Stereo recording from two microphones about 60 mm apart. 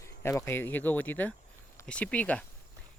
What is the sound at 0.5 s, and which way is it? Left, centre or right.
Speech, left.